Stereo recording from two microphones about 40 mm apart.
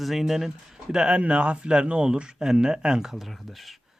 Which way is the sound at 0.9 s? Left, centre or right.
Centre.